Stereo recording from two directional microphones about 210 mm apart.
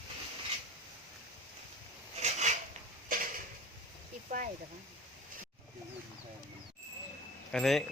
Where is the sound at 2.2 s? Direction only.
30° right (ahead or behind).